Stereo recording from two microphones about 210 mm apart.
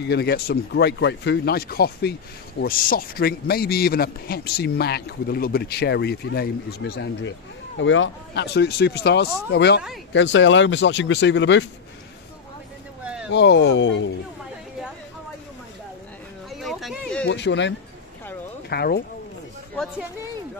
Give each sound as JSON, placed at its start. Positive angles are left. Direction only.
{"t": 0.0, "sound": "a man's voice", "side_deg": 50}
{"t": 13.0, "sound": "a sound", "side_deg": -5}
{"t": 13.3, "sound": "speech", "side_deg": 55}
{"t": 16.4, "sound": "a sound", "side_deg": 0}
{"t": 17.3, "sound": "a man's voice", "side_deg": 55}
{"t": 19.7, "sound": "speech", "side_deg": 5}